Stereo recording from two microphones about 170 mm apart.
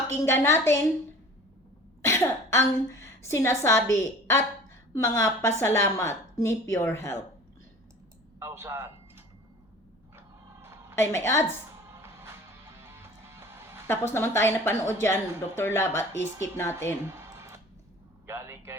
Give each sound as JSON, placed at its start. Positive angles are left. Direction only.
{"t": 0.1, "sound": "a woman's voice", "side_deg": 15}
{"t": 2.0, "sound": "a woman's voice", "side_deg": 15}
{"t": 8.4, "sound": "speech", "side_deg": -15}
{"t": 10.2, "sound": "music", "side_deg": -15}
{"t": 10.9, "sound": "a woman's voice", "side_deg": 15}
{"t": 11.9, "sound": "music", "side_deg": -15}
{"t": 13.8, "sound": "a woman's voice", "side_deg": 15}
{"t": 18.3, "sound": "a man's voice", "side_deg": -15}